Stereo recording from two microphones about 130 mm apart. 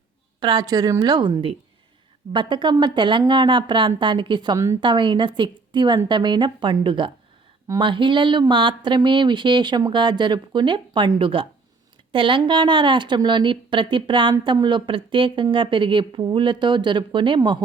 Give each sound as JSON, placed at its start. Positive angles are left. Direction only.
{"t": 0.3, "sound": "speech", "side_deg": -35}
{"t": 4.5, "sound": "a woman's voice", "side_deg": -20}
{"t": 4.8, "sound": "speech", "side_deg": -35}